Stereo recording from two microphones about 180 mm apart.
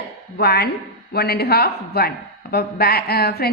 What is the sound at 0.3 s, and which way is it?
A woman's voice, 60° left (ahead or behind).